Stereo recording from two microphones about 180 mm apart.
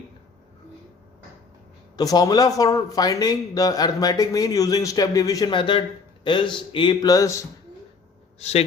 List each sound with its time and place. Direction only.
2.0 s speech: 20° left (ahead or behind)
8.4 s a man's voice: 35° left (ahead or behind)